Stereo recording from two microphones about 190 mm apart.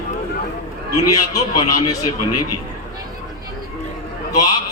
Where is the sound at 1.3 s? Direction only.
20° left (ahead or behind).